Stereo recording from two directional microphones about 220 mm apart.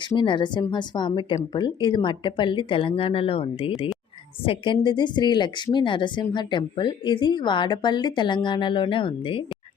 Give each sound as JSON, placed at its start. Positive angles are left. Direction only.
{"t": 0.0, "sound": "speech", "side_deg": 20}